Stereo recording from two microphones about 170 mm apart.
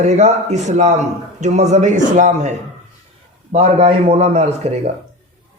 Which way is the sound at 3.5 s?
35° right (ahead or behind).